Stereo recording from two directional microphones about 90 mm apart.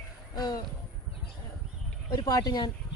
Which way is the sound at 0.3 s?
45° left (ahead or behind).